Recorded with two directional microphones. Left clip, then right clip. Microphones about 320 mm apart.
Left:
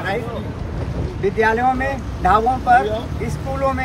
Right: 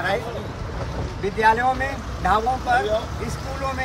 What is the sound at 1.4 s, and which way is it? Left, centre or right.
Speech, centre.